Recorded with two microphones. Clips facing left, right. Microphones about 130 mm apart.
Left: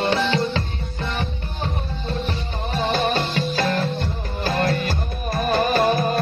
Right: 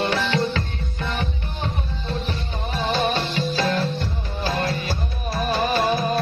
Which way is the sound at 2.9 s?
45° left (ahead or behind).